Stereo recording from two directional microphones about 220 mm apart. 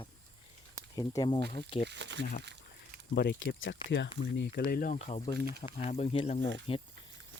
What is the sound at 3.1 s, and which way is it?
Speech, 50° left (ahead or behind).